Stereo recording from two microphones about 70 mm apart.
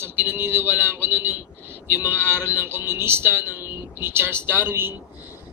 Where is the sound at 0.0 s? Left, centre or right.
Right.